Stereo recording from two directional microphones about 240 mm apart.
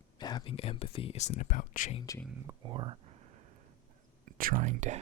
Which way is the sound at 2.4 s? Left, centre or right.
Centre.